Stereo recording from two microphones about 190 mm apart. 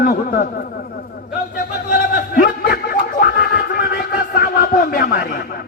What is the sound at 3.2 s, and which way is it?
Music, 50° left (ahead or behind).